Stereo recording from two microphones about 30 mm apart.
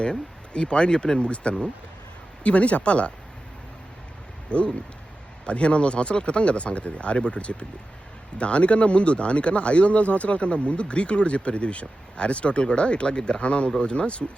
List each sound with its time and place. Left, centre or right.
0.0 s speech: left
2.4 s speech: left
4.5 s speech: left